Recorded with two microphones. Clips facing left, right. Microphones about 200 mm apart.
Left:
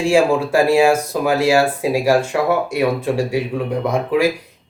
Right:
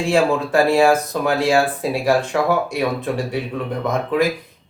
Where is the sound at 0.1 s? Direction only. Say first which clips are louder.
Left 2 dB; 10° left (ahead or behind).